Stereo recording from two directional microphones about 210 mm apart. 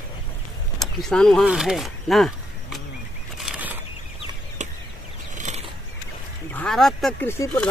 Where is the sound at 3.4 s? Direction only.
5° right (ahead or behind).